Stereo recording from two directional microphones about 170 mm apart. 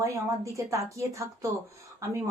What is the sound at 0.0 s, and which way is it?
Speech, 15° right (ahead or behind).